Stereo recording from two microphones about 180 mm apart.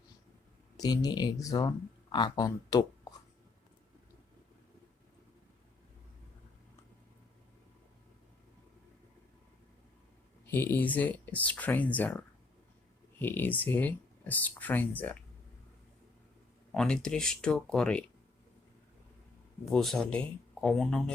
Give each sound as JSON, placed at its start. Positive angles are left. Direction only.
{"t": 0.8, "sound": "speech", "side_deg": 20}
{"t": 10.4, "sound": "speech", "side_deg": 10}
{"t": 16.7, "sound": "speech", "side_deg": 5}
{"t": 19.7, "sound": "speech", "side_deg": 5}